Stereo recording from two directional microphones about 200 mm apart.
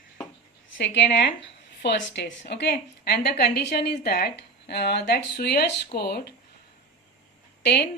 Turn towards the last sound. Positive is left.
turn(degrees=55)  # may be behind; listen again after turning